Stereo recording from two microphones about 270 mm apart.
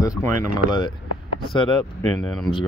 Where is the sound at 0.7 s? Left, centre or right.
Centre.